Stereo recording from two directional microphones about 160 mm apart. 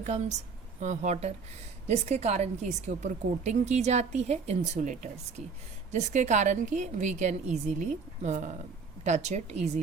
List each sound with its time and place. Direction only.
0.0 s a woman's voice: 45° right (ahead or behind)